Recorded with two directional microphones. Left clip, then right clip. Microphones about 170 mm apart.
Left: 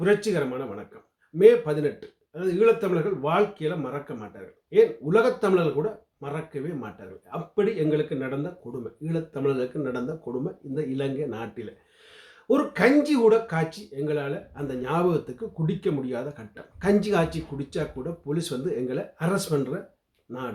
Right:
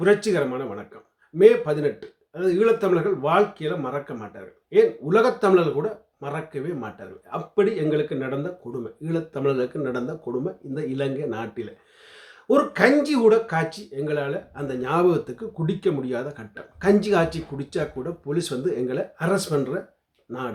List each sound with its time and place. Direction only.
0.0 s speech: 20° right (ahead or behind)